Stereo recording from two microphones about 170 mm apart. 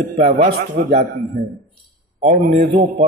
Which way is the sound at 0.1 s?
60° right (ahead or behind).